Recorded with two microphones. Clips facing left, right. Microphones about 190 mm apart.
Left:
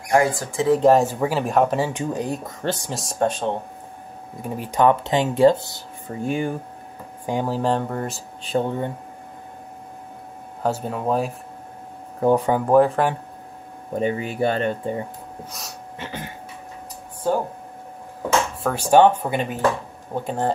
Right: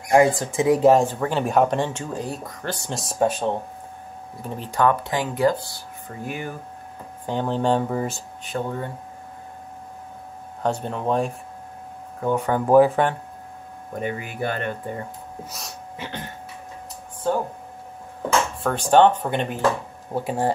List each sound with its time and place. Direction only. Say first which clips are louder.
0.1 s speech: right 2 dB; 20° right (ahead or behind); by 1.0 s 5° right (ahead or behind)
1.0 s speech: left 1 dB; 5° left (ahead or behind); by 2.8 s 25° left (ahead or behind)
2.9 s speech: right 4 dB; centre (ahead or behind)
4.4 s speech: left 3 dB; 15° left (ahead or behind)
7.2 s speech: even; 10° left (ahead or behind)
8.4 s speech: left 5 dB; 25° left (ahead or behind)
10.6 s speech: left 1 dB; 5° left (ahead or behind)
12.2 s speech: left 5 dB; 35° left (ahead or behind)
12.6 s speech: right 2 dB; centre (ahead or behind)
13.9 s speech: left 6 dB; 25° left (ahead or behind)
15.5 s speech: even; centre (ahead or behind)
18.6 s speech: left 1 dB; 5° left (ahead or behind)
20.2 s speech: even; 10° right (ahead or behind)